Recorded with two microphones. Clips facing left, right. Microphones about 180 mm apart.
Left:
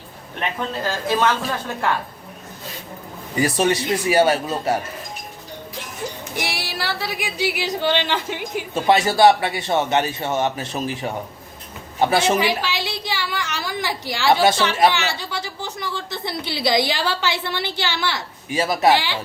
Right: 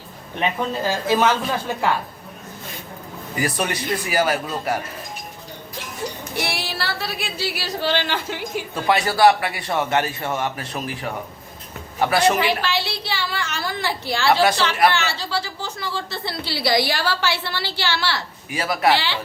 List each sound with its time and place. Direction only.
0.3 s speech: 15° right (ahead or behind)
3.3 s speech: 25° left (ahead or behind)
6.3 s a woman's voice: 15° left (ahead or behind)